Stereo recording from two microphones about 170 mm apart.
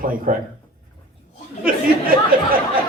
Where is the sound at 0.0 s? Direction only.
55° right (ahead or behind).